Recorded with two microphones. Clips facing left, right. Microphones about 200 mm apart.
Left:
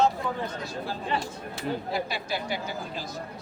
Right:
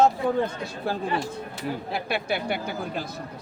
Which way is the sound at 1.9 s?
60° right (ahead or behind).